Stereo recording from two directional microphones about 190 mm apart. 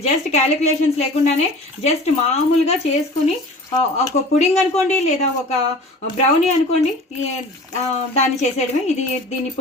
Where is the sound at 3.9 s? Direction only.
35° left (ahead or behind).